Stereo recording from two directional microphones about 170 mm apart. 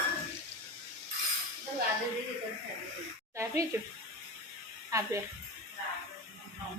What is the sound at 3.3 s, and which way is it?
Speech, 20° right (ahead or behind).